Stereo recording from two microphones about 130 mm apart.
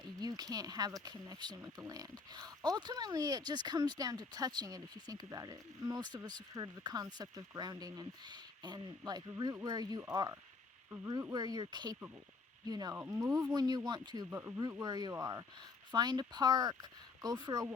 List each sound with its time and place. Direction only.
0.0 s speech: 30° right (ahead or behind)
11.1 s speech: 25° right (ahead or behind)
14.3 s speech: 15° right (ahead or behind)
14.7 s speech: 30° right (ahead or behind)